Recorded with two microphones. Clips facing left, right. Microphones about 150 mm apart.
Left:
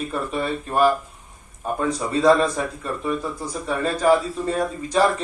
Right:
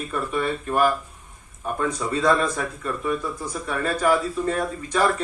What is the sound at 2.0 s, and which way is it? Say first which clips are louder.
Speech: left 5 dB; 25° left (ahead or behind).